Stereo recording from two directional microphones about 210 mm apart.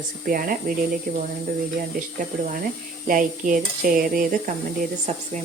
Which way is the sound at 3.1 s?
40° right (ahead or behind).